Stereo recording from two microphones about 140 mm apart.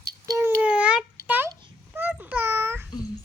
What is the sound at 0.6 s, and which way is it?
Babbling, 5° right (ahead or behind).